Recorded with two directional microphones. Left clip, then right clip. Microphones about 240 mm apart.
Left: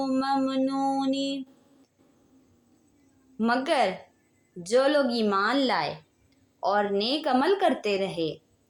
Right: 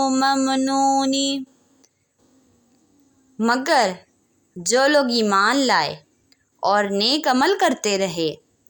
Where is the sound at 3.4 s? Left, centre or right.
Right.